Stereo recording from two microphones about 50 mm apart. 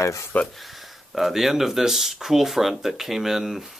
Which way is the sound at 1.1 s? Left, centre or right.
Centre.